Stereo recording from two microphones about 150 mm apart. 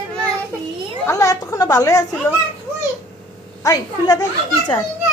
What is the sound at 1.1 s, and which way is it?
Speech, 20° left (ahead or behind).